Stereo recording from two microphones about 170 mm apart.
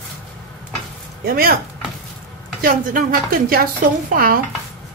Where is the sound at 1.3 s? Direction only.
60° right (ahead or behind).